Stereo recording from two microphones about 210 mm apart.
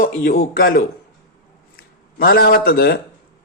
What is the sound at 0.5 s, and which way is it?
Speech, 45° left (ahead or behind).